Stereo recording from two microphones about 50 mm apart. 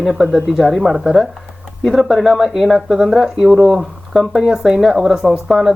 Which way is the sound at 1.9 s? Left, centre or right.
Centre.